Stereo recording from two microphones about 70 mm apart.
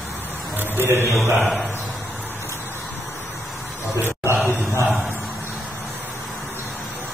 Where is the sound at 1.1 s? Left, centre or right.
Centre.